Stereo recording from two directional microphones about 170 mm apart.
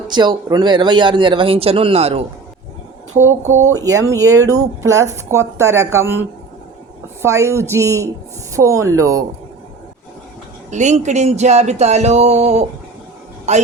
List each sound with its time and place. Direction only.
0.1 s speech: 25° right (ahead or behind)
3.5 s speech: 20° right (ahead or behind)
10.7 s a man's voice: 45° right (ahead or behind)